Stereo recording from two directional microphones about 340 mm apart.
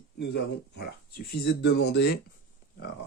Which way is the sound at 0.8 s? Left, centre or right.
Left.